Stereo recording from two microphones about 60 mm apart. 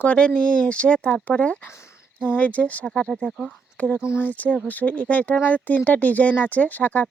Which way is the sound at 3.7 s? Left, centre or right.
Left.